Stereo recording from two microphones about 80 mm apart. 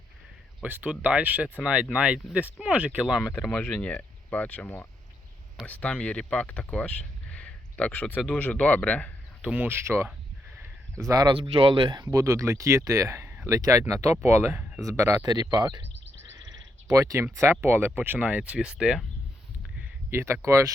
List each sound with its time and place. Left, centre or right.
0.6 s speech: centre
3.5 s speech: centre
7.3 s a sound: centre
8.3 s speech: centre
9.4 s speech: centre
11.0 s speech: right
11.3 s speech: right
12.1 s speech: right
13.5 s speech: right
15.2 s speech: right
16.4 s a sound: right
17.0 s speech: right; by 18.9 s centre
20.1 s speech: right